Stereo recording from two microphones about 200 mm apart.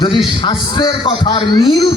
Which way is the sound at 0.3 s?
25° left (ahead or behind).